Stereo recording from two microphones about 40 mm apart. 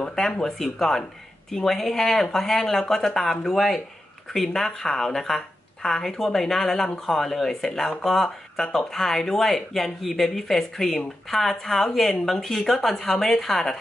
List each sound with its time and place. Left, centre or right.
0.1 s speech: centre